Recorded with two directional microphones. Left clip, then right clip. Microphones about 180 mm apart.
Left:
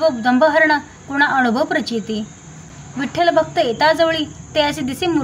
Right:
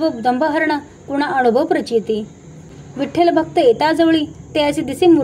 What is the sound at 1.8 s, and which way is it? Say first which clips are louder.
A woman's voice: right 6 dB; 15° right (ahead or behind).